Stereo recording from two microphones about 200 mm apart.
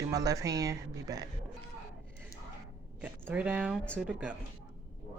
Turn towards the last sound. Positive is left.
turn(degrees=-5)  # may be behind; listen again after turning